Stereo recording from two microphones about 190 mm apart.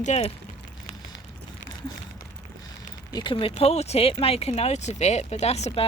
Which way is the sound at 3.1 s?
25° left (ahead or behind).